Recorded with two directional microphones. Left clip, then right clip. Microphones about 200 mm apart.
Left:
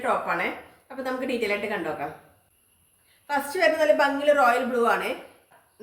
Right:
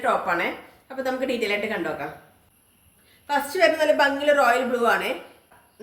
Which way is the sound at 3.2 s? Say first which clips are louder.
Right 3 dB; 10° right (ahead or behind).